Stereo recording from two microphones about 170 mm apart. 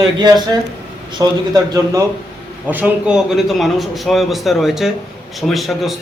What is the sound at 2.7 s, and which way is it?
A man's voice, 10° right (ahead or behind).